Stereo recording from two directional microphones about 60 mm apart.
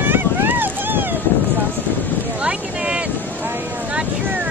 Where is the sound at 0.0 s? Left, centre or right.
Right.